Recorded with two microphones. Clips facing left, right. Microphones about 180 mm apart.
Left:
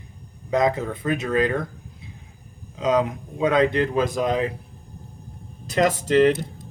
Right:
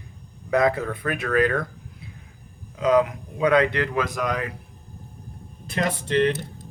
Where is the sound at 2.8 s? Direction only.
20° left (ahead or behind).